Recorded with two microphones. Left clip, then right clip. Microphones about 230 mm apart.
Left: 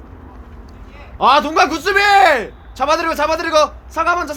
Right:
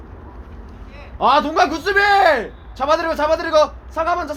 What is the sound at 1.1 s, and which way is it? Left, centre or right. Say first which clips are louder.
A man's voice: left 3 dB; left.